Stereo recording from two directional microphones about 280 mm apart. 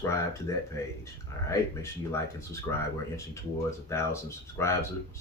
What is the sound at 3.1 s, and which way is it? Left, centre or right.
Speech, centre.